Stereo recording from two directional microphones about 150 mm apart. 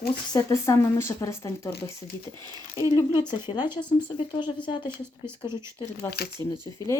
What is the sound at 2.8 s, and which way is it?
Speech, 20° left (ahead or behind).